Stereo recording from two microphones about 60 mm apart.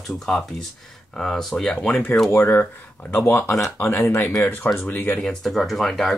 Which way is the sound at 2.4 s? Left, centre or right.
Left.